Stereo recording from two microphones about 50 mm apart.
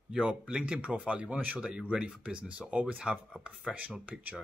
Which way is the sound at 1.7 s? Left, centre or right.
Centre.